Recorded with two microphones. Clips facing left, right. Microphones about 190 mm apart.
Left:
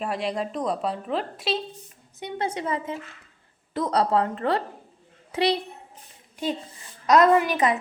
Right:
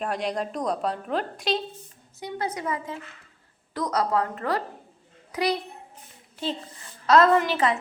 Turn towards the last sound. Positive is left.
turn(degrees=15)  # may be behind; listen again after turning